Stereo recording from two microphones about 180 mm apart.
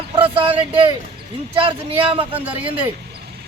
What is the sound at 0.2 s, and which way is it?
Speech, 30° right (ahead or behind).